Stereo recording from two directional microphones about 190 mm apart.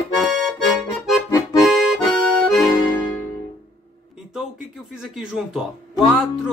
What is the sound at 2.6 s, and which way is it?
Music, 20° left (ahead or behind).